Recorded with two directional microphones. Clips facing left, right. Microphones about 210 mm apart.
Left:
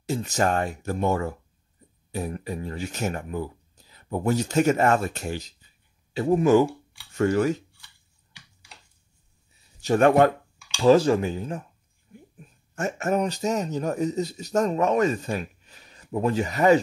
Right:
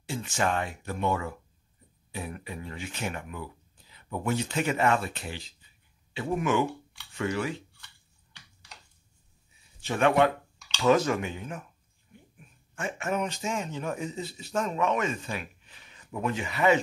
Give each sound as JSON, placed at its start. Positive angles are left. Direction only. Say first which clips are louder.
{"t": 0.0, "sound": "speech", "louder": "left 5 dB", "side_deg": 40}
{"t": 9.8, "sound": "speech", "louder": "left 5 dB", "side_deg": 40}
{"t": 10.8, "sound": "speech", "louder": "left 6 dB", "side_deg": 30}